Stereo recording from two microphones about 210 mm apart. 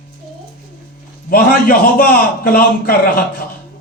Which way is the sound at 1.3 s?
45° left (ahead or behind).